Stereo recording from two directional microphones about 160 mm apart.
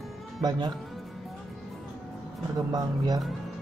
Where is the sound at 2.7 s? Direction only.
25° right (ahead or behind).